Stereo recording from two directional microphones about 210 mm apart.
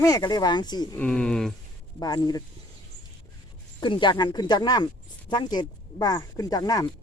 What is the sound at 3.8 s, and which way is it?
Speech, 20° left (ahead or behind).